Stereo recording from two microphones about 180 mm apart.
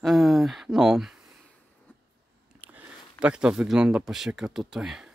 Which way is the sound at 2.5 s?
10° right (ahead or behind).